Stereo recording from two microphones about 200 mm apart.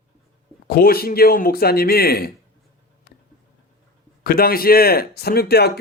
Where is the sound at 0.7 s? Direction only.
50° left (ahead or behind).